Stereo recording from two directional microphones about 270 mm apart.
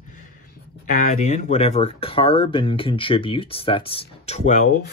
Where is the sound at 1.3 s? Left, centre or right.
Left.